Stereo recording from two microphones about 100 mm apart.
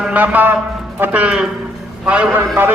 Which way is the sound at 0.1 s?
15° right (ahead or behind).